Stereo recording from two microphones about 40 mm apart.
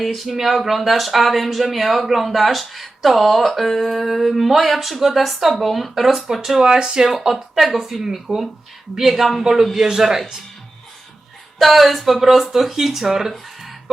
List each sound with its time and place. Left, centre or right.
0.0 s speech: centre
6.6 s speech: centre
7.1 s speech: centre
11.6 s speech: centre
13.3 s music: centre